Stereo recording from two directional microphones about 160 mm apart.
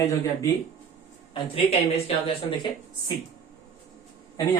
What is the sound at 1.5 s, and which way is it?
Speech, 40° left (ahead or behind).